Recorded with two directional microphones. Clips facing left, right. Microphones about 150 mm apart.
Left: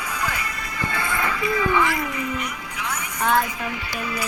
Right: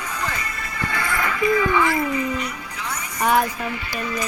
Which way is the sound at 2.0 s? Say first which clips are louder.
Right 4 dB; 10° left (ahead or behind).